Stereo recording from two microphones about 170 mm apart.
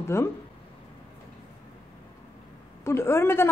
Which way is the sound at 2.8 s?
15° left (ahead or behind).